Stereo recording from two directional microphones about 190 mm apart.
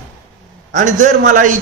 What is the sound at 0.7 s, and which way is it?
Speech, 40° right (ahead or behind).